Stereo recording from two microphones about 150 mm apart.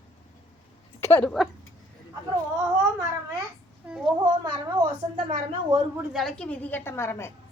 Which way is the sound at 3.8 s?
5° right (ahead or behind).